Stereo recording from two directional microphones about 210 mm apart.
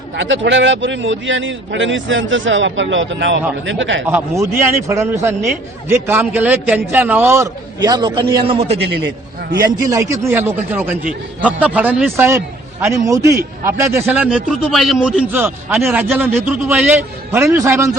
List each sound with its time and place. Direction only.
0.2 s a man's voice: 60° right (ahead or behind)
4.0 s a man's voice: 10° right (ahead or behind); by 8.7 s 25° right (ahead or behind)
9.6 s a man's voice: 15° right (ahead or behind)